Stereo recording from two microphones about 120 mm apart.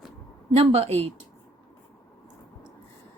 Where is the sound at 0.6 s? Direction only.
55° right (ahead or behind).